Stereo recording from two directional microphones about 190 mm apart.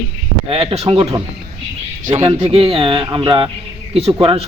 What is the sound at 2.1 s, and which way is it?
Speech, 25° right (ahead or behind).